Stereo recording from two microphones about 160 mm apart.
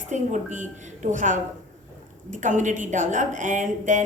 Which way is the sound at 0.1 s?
50° right (ahead or behind).